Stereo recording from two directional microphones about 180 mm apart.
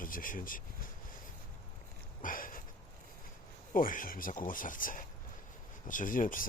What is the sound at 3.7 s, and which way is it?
Speech, 50° left (ahead or behind).